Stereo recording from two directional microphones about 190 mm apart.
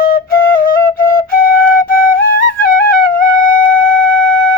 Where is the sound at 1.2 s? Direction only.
50° left (ahead or behind).